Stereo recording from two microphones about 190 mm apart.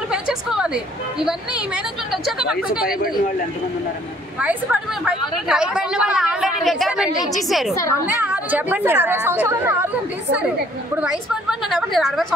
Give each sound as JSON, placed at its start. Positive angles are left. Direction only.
{"t": 0.1, "sound": "a sound", "side_deg": -5}
{"t": 2.2, "sound": "a woman's voice", "side_deg": -5}
{"t": 5.0, "sound": "a woman's voice", "side_deg": -5}
{"t": 7.7, "sound": "a woman's voice", "side_deg": 15}
{"t": 8.2, "sound": "speech", "side_deg": -10}
{"t": 11.7, "sound": "a woman's voice", "side_deg": 0}